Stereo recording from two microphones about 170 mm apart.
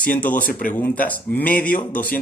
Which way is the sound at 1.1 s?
10° left (ahead or behind).